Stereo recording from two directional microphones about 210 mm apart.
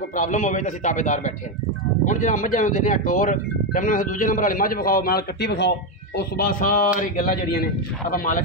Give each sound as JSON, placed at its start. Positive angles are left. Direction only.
{"t": 0.1, "sound": "speech", "side_deg": 35}